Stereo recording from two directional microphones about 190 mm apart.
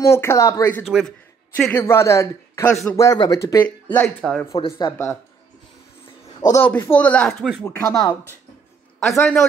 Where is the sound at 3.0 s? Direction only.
20° left (ahead or behind).